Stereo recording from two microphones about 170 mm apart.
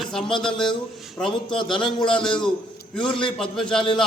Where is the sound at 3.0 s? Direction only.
30° left (ahead or behind).